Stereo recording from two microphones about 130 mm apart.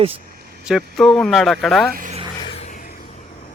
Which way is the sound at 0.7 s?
Centre (ahead or behind).